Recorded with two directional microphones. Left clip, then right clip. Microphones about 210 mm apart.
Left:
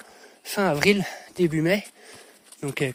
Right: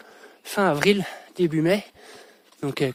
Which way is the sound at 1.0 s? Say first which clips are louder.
Even; 15° right (ahead or behind).